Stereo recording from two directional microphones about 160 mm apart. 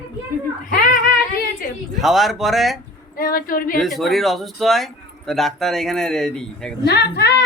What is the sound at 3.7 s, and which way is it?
Speech, centre (ahead or behind).